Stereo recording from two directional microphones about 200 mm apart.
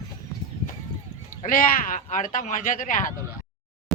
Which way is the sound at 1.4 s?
45° left (ahead or behind).